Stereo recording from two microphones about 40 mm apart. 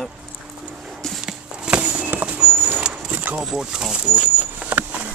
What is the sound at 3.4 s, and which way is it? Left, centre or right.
Speech, centre.